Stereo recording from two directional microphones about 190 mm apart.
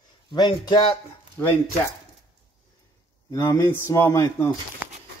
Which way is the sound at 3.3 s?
15° left (ahead or behind).